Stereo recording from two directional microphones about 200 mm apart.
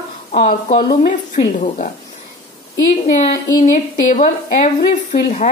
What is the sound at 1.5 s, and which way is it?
Speech, 40° left (ahead or behind).